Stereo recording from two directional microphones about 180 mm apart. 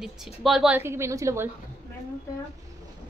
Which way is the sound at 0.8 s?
15° right (ahead or behind).